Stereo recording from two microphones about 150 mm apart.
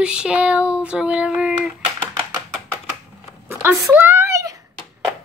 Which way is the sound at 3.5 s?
15° right (ahead or behind).